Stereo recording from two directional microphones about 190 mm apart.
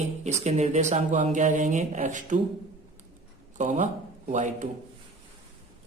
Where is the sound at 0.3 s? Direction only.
35° right (ahead or behind).